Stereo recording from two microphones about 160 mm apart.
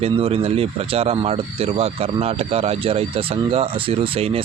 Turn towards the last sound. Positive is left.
turn(degrees=-35)  # may be behind; listen again after turning